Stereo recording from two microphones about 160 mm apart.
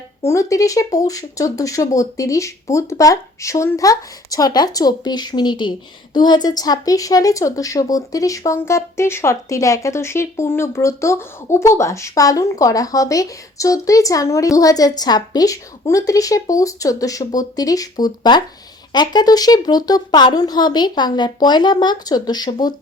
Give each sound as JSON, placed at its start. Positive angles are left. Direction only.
{"t": 0.3, "sound": "a woman's voice", "side_deg": 20}